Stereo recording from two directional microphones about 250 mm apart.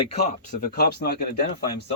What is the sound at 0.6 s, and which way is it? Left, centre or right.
Speech, left.